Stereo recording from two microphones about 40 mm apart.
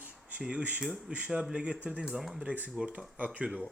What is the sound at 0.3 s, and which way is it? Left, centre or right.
Speech, right.